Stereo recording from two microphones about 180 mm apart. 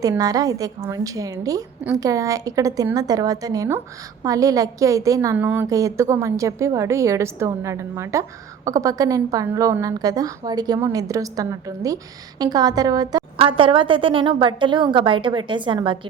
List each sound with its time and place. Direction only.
0.0 s a woman's voice: 20° right (ahead or behind)